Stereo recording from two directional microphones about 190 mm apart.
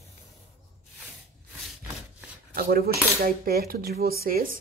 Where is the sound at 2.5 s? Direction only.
50° right (ahead or behind).